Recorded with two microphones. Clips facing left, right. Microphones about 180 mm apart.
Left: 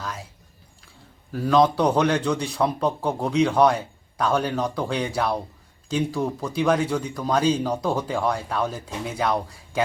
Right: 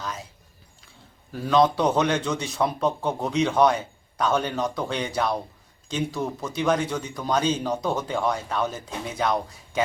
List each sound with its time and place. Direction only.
0.0 s a sound: centre (ahead or behind)
1.3 s speech: centre (ahead or behind)
2.0 s speech: centre (ahead or behind)